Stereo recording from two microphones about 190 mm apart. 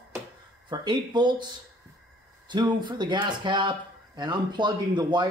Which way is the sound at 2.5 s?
25° right (ahead or behind).